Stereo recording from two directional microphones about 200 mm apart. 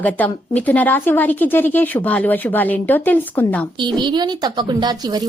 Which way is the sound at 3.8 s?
20° right (ahead or behind).